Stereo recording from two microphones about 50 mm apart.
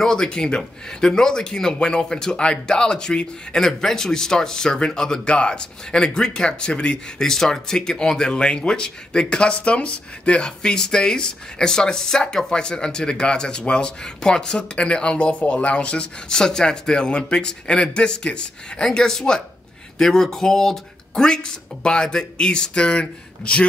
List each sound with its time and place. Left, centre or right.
0.0 s speech: centre
7.2 s speech: centre
18.9 s speech: centre; by 23.7 s left